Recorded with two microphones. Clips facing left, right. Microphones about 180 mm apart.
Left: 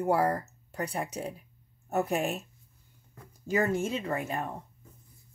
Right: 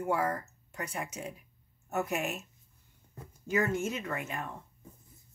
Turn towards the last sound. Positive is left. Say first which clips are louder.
# left 5 dB
turn(degrees=35)  # may be behind; listen again after turning